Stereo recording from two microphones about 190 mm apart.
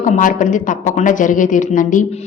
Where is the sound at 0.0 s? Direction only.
45° left (ahead or behind).